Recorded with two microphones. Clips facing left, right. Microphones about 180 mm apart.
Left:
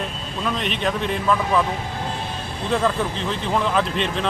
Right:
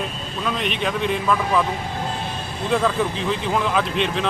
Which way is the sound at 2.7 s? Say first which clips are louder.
Right 1 dB; centre (ahead or behind).